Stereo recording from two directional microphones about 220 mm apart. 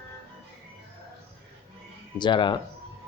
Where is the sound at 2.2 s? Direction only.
20° left (ahead or behind).